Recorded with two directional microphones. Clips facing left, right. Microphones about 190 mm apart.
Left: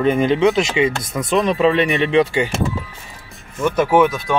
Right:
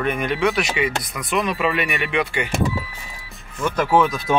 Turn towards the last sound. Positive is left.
turn(degrees=0)  # may be behind; listen again after turning